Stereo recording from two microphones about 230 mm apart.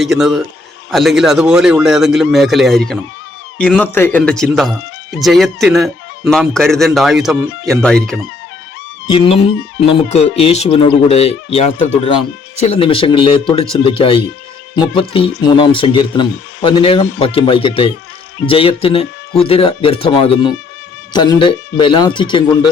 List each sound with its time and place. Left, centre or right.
0.0 s speech: centre
9.0 s speech: left